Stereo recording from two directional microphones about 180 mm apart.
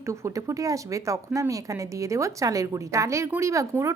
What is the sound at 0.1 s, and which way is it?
A woman's voice, 15° right (ahead or behind).